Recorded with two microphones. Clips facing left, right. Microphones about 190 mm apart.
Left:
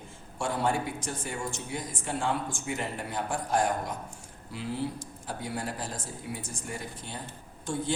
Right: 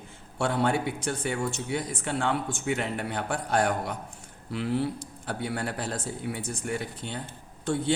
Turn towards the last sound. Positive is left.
turn(degrees=-65)  # may be behind; listen again after turning